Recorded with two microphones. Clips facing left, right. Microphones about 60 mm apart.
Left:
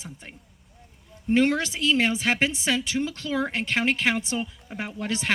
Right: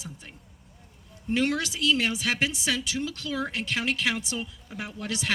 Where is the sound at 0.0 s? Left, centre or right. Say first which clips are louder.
Left 1 dB; left.